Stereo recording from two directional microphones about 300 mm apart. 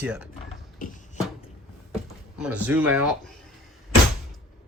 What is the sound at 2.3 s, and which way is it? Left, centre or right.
Speech, centre.